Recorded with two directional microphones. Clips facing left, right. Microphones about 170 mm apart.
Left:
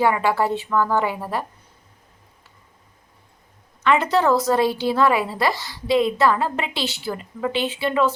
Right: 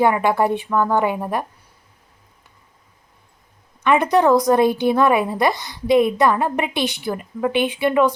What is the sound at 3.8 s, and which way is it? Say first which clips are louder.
A woman's voice: right 3 dB; 15° right (ahead or behind).